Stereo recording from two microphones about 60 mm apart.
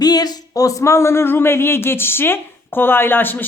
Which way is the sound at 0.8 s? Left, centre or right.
Left.